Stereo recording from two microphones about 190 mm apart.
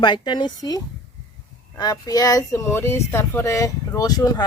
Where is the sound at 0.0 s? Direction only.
25° left (ahead or behind).